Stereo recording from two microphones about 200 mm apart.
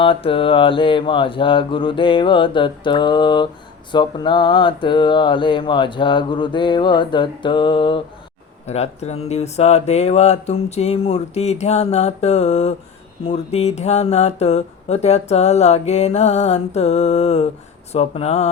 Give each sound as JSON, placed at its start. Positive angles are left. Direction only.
{"t": 0.0, "sound": "mantra", "side_deg": 25}
{"t": 8.6, "sound": "speech", "side_deg": 35}